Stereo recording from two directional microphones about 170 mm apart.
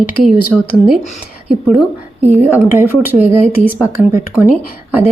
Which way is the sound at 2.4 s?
10° right (ahead or behind).